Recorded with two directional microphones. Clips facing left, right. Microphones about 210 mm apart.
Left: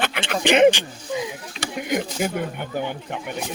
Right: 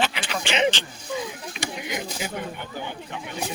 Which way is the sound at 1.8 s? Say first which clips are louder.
Left 11 dB; 50° left (ahead or behind).